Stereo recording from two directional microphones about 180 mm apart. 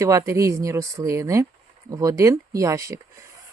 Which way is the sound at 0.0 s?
15° right (ahead or behind).